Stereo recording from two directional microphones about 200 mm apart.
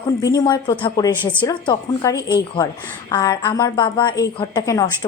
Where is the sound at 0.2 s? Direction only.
20° left (ahead or behind).